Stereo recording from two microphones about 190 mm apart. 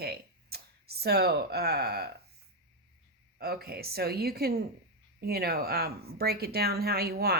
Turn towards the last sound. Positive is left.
turn(degrees=-55)  # may be behind; listen again after turning